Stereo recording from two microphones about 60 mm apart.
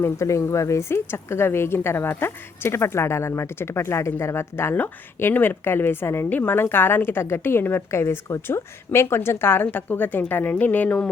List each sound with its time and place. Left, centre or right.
0.2 s a woman's voice: left
7.8 s a woman's voice: left